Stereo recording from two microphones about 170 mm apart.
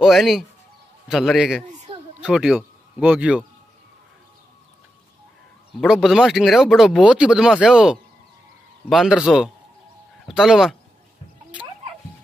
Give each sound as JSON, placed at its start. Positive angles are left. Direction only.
{"t": 0.0, "sound": "speech", "side_deg": 0}
{"t": 1.7, "sound": "a sound", "side_deg": -45}
{"t": 2.2, "sound": "speech", "side_deg": -5}
{"t": 5.8, "sound": "speech", "side_deg": 0}